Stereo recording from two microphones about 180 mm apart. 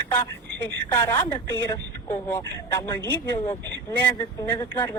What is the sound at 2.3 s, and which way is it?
Speech, 15° left (ahead or behind).